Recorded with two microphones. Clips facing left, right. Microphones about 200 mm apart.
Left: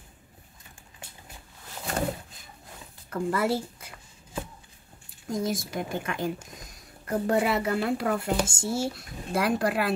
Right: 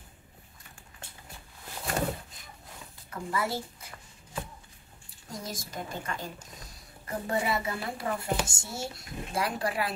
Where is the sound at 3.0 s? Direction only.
70° left (ahead or behind).